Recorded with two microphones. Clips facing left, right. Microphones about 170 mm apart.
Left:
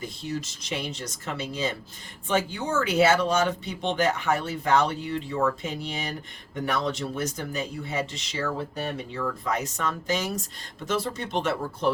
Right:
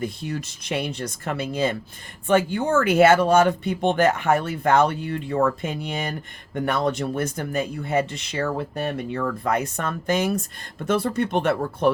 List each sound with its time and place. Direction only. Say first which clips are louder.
0.0 s speech: right 4 dB; 55° right (ahead or behind)